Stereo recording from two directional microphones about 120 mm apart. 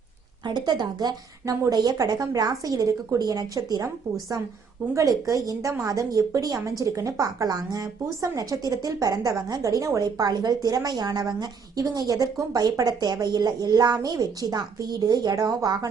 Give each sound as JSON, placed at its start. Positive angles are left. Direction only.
{"t": 0.4, "sound": "a woman's voice", "side_deg": -35}
{"t": 4.9, "sound": "a woman's voice", "side_deg": -25}